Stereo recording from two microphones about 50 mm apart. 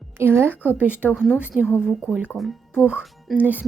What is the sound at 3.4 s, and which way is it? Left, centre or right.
Speech, right.